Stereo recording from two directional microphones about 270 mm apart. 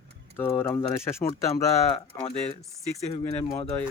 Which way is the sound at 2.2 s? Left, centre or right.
Left.